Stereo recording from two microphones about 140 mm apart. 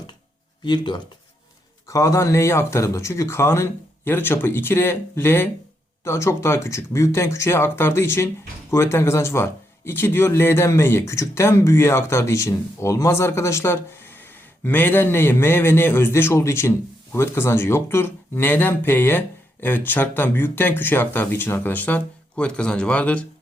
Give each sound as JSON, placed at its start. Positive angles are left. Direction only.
{"t": 0.6, "sound": "speech", "side_deg": 35}
{"t": 1.9, "sound": "speech", "side_deg": 25}